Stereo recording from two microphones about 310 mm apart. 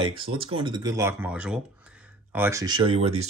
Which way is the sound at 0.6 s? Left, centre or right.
Centre.